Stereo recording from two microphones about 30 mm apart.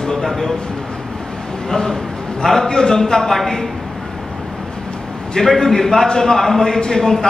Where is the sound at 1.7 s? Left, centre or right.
Centre.